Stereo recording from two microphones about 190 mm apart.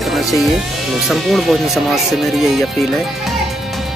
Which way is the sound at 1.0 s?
Centre (ahead or behind).